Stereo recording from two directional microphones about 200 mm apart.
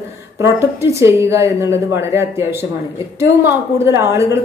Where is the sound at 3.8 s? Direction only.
15° right (ahead or behind).